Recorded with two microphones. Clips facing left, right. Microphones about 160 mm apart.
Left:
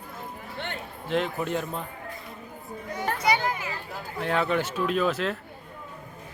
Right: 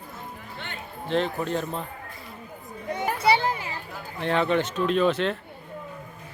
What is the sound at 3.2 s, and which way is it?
Children playing, 30° right (ahead or behind).